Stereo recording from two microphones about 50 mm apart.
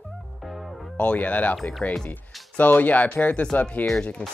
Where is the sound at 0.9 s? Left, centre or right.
Left.